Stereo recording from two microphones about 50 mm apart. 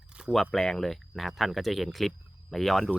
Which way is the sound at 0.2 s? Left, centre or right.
Centre.